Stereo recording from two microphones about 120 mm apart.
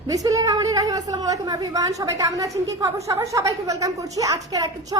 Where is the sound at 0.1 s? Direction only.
30° right (ahead or behind).